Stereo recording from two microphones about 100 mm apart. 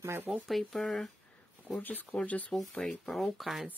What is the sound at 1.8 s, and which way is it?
Speech, 20° left (ahead or behind).